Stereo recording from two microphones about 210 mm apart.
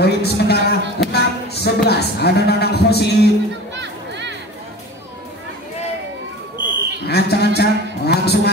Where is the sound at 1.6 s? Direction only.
50° left (ahead or behind).